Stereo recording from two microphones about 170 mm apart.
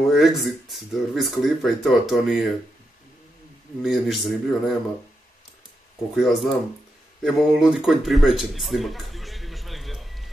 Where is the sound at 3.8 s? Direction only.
Centre (ahead or behind).